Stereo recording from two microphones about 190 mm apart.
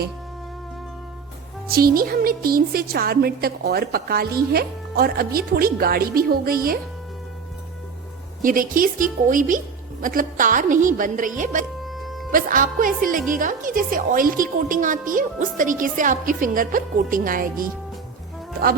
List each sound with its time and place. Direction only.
1.7 s a woman's voice: 50° right (ahead or behind)
8.4 s a woman's voice: 45° right (ahead or behind)
11.8 s music: centre (ahead or behind)
12.3 s a woman's voice: 45° right (ahead or behind)